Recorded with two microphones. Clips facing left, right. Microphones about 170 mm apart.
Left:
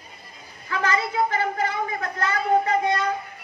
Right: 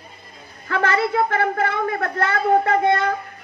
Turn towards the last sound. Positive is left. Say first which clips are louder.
# right 4 dB
turn(degrees=-60)  # may be behind; listen again after turning